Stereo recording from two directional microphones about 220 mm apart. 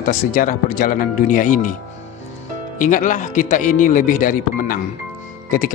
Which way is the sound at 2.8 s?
35° left (ahead or behind).